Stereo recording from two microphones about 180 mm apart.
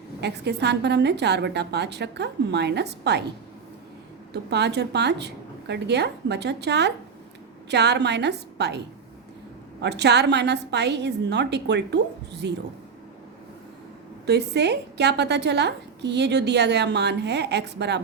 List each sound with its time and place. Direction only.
0.2 s a woman's voice: 70° right (ahead or behind)
4.3 s a woman's voice: 70° right (ahead or behind)
9.8 s a woman's voice: 70° right (ahead or behind)
14.3 s a woman's voice: 70° right (ahead or behind)